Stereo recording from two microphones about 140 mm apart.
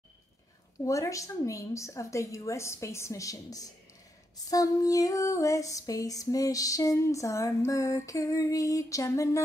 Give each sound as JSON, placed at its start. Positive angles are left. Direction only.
{"t": 0.8, "sound": "female singing", "side_deg": 20}